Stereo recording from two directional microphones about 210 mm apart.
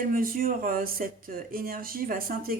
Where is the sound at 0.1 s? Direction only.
45° right (ahead or behind).